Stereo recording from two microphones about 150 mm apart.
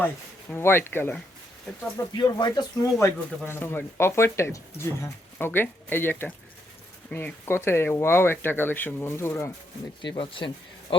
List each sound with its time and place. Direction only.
0.5 s speech: 15° left (ahead or behind)
2.1 s speech: 30° left (ahead or behind)
3.4 s speech: 15° left (ahead or behind)
10.0 s speech: 35° left (ahead or behind)